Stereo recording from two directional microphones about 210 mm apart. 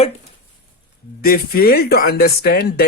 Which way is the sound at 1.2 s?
45° left (ahead or behind).